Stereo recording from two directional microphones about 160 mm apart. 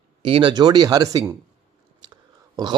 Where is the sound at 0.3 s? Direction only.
35° right (ahead or behind).